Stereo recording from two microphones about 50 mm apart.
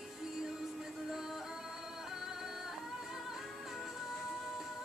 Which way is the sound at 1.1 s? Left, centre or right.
Centre.